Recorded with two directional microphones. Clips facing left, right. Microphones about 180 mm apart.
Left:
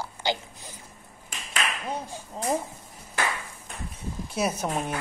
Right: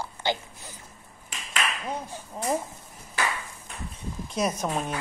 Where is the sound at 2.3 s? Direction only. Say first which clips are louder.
Even; 15° left (ahead or behind).